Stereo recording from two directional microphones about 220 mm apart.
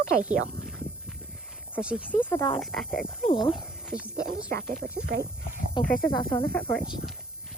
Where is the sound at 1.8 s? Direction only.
5° right (ahead or behind).